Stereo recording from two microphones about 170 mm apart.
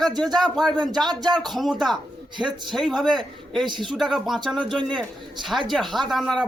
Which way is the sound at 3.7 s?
25° right (ahead or behind).